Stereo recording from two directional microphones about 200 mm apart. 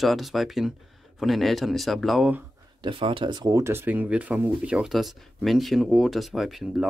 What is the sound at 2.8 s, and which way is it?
Speech, 25° right (ahead or behind).